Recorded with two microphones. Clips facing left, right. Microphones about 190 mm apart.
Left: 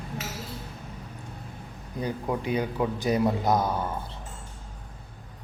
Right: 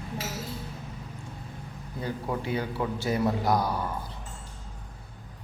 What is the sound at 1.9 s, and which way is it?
A man's voice, 15° left (ahead or behind).